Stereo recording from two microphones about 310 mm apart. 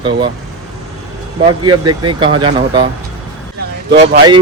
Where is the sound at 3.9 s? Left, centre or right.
Right.